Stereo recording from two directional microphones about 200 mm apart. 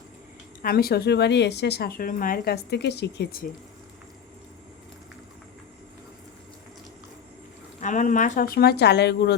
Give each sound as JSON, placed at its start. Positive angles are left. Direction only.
{"t": 0.6, "sound": "speech", "side_deg": 50}
{"t": 7.8, "sound": "speech", "side_deg": 40}